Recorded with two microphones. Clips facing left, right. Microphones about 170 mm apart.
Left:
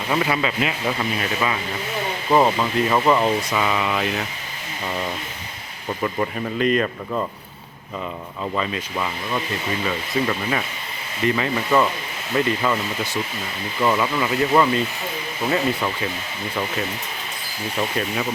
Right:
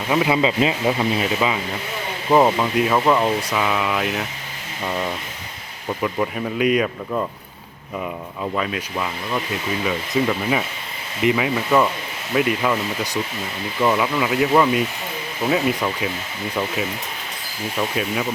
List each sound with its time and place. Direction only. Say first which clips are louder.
0.1 s speech: right 4 dB; 10° right (ahead or behind)
6.0 s speech: right 1 dB; 5° right (ahead or behind)
8.5 s speech: even; centre (ahead or behind)
13.8 s speech: right 1 dB; 5° right (ahead or behind)